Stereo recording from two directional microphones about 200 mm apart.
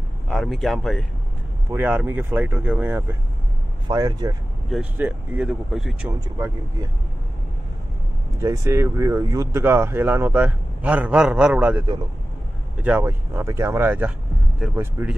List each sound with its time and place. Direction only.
0.3 s speech: centre (ahead or behind)
1.7 s speech: 10° right (ahead or behind)
3.8 s speech: 20° right (ahead or behind)
4.6 s speech: 5° right (ahead or behind)
6.2 s speech: 15° right (ahead or behind)
8.4 s speech: 15° right (ahead or behind)
12.8 s speech: 10° right (ahead or behind)